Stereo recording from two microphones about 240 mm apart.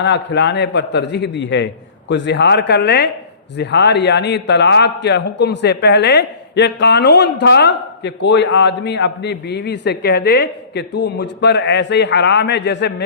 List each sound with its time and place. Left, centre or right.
0.0 s a man's voice: left